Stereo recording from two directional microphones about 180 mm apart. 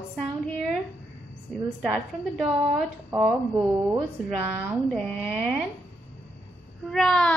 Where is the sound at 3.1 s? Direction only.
15° right (ahead or behind).